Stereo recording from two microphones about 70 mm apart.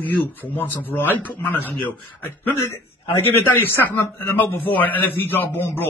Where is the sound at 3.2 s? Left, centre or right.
Left.